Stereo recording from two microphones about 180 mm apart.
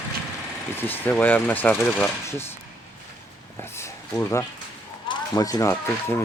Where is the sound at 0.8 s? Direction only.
10° left (ahead or behind).